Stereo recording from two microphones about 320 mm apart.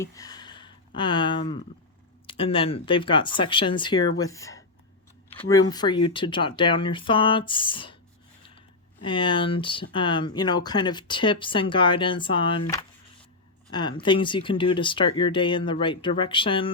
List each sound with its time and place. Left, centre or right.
0.0 s speech: centre